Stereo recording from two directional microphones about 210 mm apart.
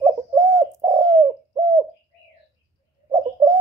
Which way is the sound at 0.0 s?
15° right (ahead or behind).